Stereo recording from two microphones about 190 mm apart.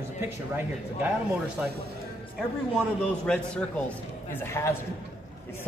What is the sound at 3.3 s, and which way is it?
Speech, 5° left (ahead or behind).